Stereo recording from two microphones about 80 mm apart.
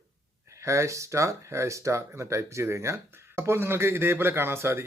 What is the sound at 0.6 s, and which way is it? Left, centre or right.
Speech, right.